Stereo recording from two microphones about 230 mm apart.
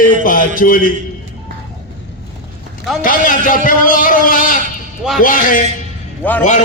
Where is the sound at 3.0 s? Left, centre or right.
Left.